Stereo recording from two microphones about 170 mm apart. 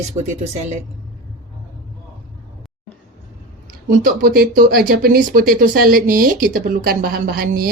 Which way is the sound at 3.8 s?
55° right (ahead or behind).